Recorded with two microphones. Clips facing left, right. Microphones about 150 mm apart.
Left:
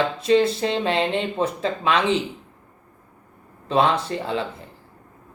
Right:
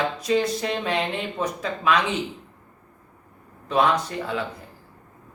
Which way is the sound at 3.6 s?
30° left (ahead or behind).